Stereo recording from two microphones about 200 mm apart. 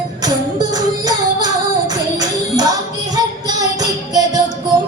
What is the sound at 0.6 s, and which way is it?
Music, 20° right (ahead or behind).